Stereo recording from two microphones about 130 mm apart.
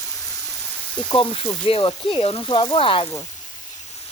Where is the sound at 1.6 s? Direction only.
40° left (ahead or behind).